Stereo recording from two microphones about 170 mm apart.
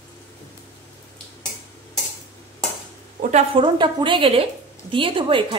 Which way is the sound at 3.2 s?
45° right (ahead or behind).